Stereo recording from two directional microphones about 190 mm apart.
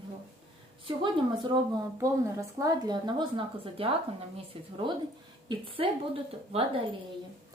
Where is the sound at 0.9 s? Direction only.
25° right (ahead or behind).